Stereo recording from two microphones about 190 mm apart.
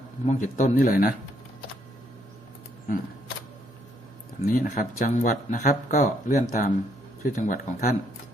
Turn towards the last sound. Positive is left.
turn(degrees=45)  # may be behind; listen again after turning